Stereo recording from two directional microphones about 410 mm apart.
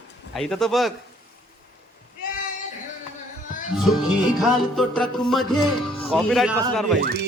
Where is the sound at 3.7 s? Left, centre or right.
Centre.